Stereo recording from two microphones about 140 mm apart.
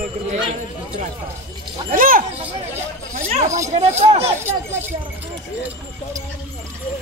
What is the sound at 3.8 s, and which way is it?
Speech, 50° right (ahead or behind).